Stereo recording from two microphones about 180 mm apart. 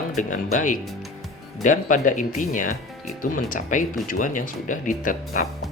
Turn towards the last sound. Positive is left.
turn(degrees=45)  # may be behind; listen again after turning